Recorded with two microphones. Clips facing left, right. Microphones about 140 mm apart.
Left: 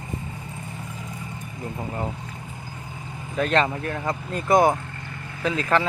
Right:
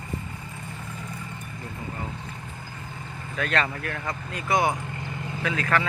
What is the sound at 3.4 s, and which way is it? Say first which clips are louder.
Speech: left 5 dB; 35° left (ahead or behind).